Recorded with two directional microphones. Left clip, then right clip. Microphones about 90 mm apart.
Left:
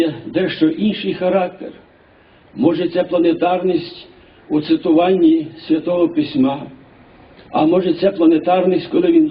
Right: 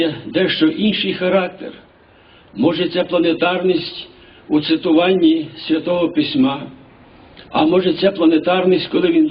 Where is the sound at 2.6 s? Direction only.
30° right (ahead or behind).